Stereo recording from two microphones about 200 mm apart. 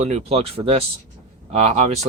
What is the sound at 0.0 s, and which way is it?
Speech, 30° right (ahead or behind).